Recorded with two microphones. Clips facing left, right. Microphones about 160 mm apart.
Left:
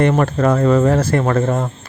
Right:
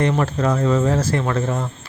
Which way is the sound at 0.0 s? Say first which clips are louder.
Left 4 dB; 55° left (ahead or behind).